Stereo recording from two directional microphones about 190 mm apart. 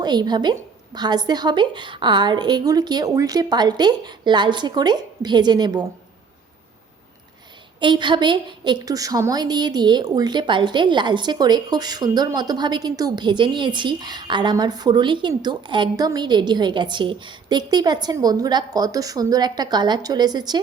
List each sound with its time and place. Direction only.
0.0 s a woman's voice: 20° right (ahead or behind)
7.8 s a woman's voice: 25° right (ahead or behind)